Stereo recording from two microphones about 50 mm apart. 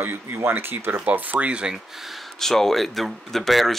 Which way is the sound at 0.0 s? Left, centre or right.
Right.